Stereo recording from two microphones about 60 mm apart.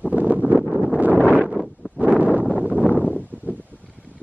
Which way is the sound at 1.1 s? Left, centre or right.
Left.